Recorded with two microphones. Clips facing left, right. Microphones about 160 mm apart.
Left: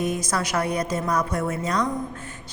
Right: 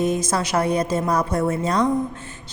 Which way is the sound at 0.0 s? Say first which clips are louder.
Right 4 dB; 25° right (ahead or behind).